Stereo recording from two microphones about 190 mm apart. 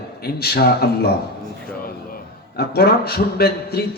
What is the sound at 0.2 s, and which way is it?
A man's voice, 55° left (ahead or behind).